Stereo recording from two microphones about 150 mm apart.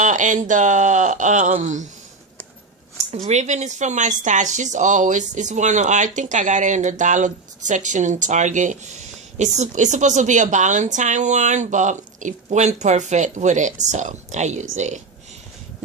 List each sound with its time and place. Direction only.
0.0 s speech: 55° right (ahead or behind)
3.2 s speech: 50° right (ahead or behind)